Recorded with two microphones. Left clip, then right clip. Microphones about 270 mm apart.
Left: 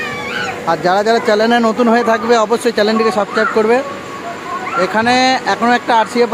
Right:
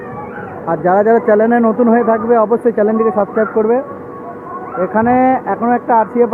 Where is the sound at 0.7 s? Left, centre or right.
Centre.